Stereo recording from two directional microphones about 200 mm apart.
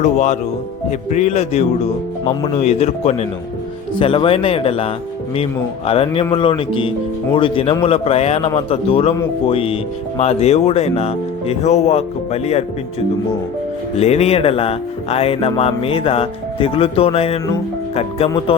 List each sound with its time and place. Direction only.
0.0 s speech: 35° left (ahead or behind)
14.0 s speech: 30° left (ahead or behind)